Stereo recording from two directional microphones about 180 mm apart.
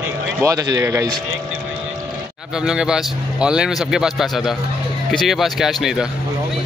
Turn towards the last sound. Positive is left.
turn(degrees=0)  # may be behind; listen again after turning